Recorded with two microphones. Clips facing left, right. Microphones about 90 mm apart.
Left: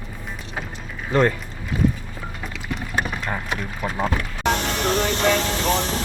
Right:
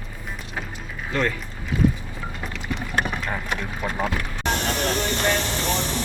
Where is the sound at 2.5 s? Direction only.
5° left (ahead or behind).